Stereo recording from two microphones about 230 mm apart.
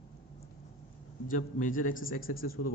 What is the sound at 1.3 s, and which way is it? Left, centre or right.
A man's voice, left.